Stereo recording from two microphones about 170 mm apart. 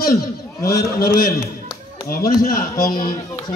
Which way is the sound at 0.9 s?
60° left (ahead or behind).